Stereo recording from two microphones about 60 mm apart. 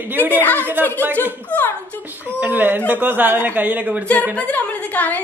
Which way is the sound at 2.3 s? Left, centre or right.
Right.